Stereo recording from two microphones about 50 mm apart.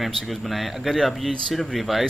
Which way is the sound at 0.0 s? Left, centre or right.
Centre.